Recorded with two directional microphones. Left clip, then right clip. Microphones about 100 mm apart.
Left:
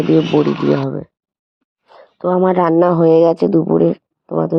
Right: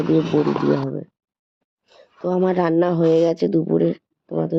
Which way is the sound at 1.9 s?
25° left (ahead or behind).